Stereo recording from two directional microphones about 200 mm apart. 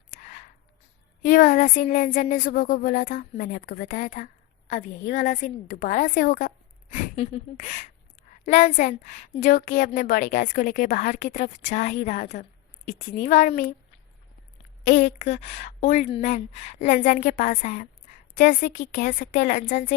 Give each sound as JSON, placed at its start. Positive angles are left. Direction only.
{"t": 0.2, "sound": "a sound", "side_deg": 40}
{"t": 1.2, "sound": "a woman's voice", "side_deg": 40}
{"t": 14.8, "sound": "a woman's voice", "side_deg": 40}